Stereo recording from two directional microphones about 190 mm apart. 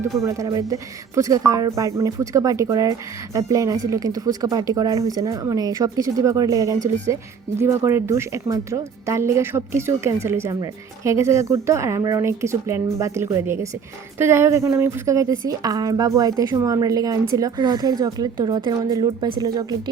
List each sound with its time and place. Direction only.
0.2 s a woman's voice: 15° right (ahead or behind)
6.7 s speech: 40° right (ahead or behind)
7.6 s a woman's voice: 15° right (ahead or behind)